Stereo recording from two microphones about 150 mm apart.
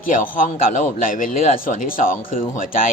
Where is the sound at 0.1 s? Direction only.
65° left (ahead or behind).